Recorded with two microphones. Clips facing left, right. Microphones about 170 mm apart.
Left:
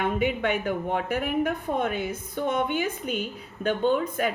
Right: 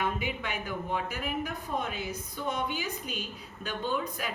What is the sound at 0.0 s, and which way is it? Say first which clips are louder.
A woman's voice: left 8 dB; 55° left (ahead or behind).